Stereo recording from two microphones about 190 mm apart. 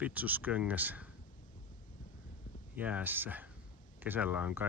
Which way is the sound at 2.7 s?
10° right (ahead or behind).